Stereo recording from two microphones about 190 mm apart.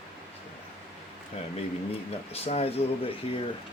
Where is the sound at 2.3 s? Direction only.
35° left (ahead or behind).